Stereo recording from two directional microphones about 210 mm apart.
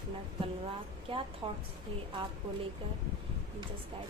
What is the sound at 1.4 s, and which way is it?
Speech, 25° right (ahead or behind).